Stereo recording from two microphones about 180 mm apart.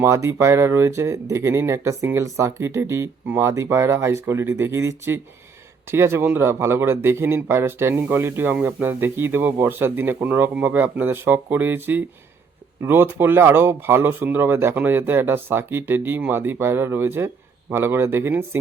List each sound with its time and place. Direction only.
0.0 s speech: 15° right (ahead or behind)